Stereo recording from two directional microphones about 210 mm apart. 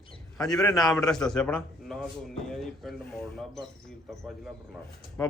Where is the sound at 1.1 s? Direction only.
5° left (ahead or behind).